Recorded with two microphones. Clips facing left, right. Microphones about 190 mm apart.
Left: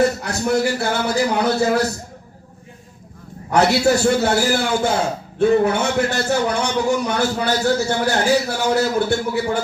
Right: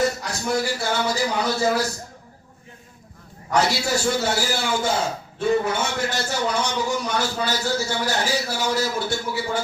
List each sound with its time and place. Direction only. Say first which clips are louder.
0.0 s a man's voice: left 5 dB; 60° left (ahead or behind)
3.5 s a man's voice: left 6 dB; 60° left (ahead or behind)